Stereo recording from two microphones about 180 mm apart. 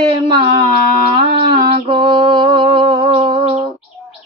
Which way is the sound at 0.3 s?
25° right (ahead or behind).